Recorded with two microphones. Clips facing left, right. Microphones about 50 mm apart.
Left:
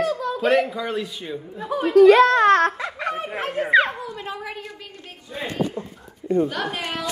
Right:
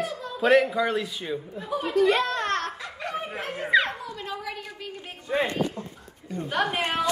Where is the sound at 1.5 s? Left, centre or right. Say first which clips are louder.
Left 8 dB; left.